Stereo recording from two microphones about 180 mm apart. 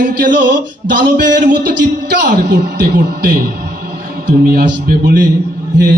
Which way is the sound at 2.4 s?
55° right (ahead or behind).